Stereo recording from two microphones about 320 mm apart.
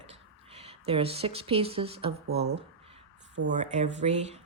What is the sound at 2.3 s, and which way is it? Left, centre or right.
Speech, right.